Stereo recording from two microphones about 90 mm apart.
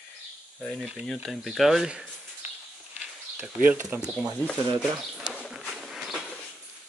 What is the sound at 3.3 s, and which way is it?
Speech, 20° right (ahead or behind).